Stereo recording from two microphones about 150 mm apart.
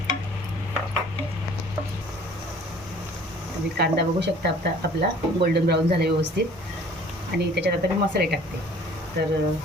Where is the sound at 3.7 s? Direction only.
90° right.